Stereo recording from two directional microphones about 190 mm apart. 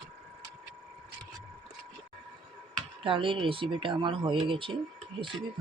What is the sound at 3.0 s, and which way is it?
Speech, 25° right (ahead or behind).